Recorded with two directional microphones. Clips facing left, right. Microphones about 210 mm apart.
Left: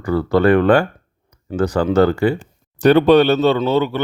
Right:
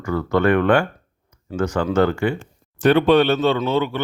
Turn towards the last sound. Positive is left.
turn(degrees=35)  # may be behind; listen again after turning